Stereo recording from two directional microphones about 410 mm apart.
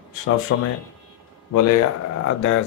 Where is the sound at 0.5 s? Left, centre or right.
Left.